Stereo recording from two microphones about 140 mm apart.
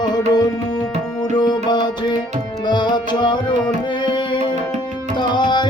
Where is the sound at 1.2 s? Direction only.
30° left (ahead or behind).